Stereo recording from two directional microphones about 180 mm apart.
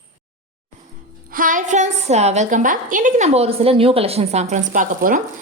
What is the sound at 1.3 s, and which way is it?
A woman's voice, 50° right (ahead or behind).